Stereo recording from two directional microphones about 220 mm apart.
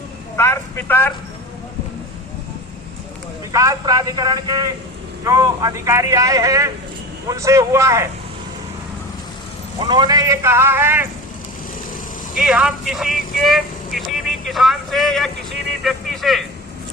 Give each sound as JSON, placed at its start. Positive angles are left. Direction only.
{"t": 0.3, "sound": "speech", "side_deg": 10}
{"t": 3.5, "sound": "a man's voice", "side_deg": -15}
{"t": 9.7, "sound": "a man's voice", "side_deg": -20}
{"t": 12.3, "sound": "speech", "side_deg": 0}